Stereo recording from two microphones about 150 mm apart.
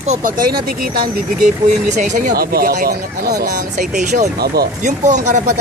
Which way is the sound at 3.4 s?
70° right (ahead or behind).